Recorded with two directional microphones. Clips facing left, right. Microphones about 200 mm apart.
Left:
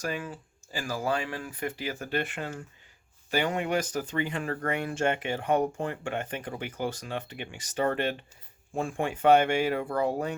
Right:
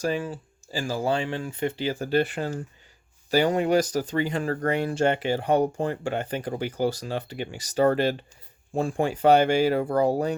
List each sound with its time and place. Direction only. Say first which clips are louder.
0.0 s speech: right 7 dB; 30° right (ahead or behind)